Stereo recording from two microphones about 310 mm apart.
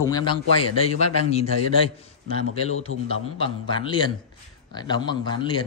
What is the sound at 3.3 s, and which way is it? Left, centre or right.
Speech, centre.